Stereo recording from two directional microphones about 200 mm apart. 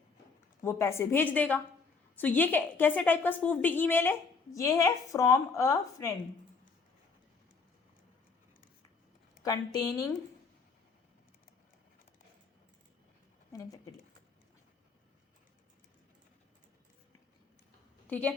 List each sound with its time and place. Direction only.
0.6 s a woman's voice: 15° left (ahead or behind)
9.4 s a woman's voice: 20° left (ahead or behind)
18.1 s a woman's voice: 5° left (ahead or behind)